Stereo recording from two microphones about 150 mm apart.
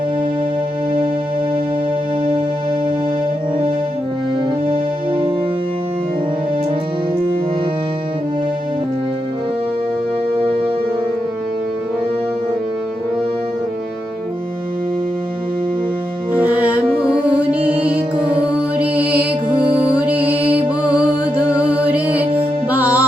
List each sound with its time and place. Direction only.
4.7 s music: 35° right (ahead or behind)
16.3 s music: 10° right (ahead or behind)